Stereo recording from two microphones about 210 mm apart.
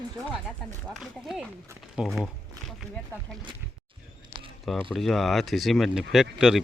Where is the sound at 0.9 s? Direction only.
Centre (ahead or behind).